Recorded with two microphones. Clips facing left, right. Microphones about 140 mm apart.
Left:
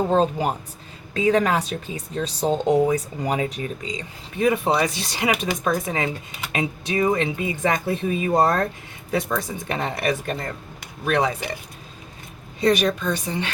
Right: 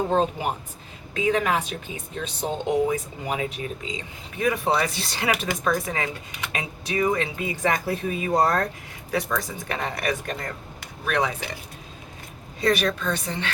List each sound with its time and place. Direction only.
0.1 s speech: 35° left (ahead or behind)
4.4 s speech: 20° left (ahead or behind)
12.5 s a woman's voice: 20° left (ahead or behind)